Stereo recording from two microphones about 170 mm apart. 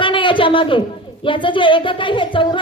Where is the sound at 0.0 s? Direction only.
30° left (ahead or behind).